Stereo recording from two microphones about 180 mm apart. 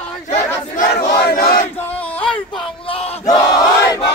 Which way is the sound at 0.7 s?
60° left (ahead or behind).